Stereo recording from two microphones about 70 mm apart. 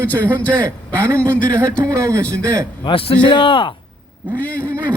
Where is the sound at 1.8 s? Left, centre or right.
Right.